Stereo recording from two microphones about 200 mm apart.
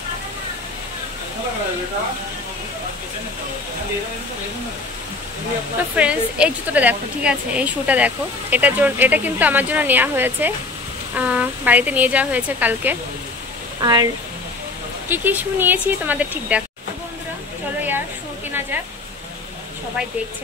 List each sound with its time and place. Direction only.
5.9 s a woman's voice: 5° right (ahead or behind)
13.7 s speech: 20° right (ahead or behind)
15.0 s a woman's voice: 10° right (ahead or behind)